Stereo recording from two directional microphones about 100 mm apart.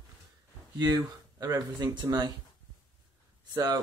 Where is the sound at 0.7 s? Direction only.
40° right (ahead or behind).